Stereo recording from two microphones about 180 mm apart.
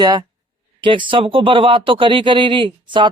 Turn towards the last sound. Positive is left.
turn(degrees=-25)  # may be behind; listen again after turning